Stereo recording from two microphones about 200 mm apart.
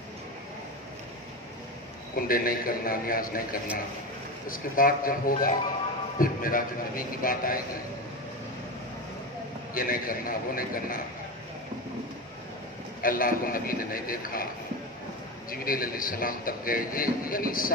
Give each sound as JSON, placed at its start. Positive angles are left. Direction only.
{"t": 2.1, "sound": "a man's voice", "side_deg": 45}
{"t": 9.8, "sound": "a man's voice", "side_deg": 45}
{"t": 13.0, "sound": "a man's voice", "side_deg": 45}
{"t": 15.5, "sound": "a man's voice", "side_deg": 45}